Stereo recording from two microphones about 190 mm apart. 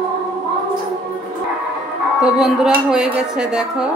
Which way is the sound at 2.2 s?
5° right (ahead or behind).